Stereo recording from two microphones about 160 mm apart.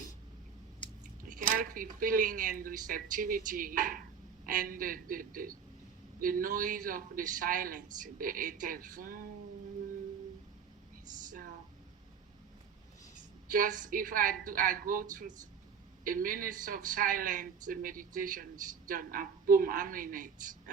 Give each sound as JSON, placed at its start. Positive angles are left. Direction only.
{"t": 1.2, "sound": "speech", "side_deg": -55}
{"t": 13.5, "sound": "speech", "side_deg": -55}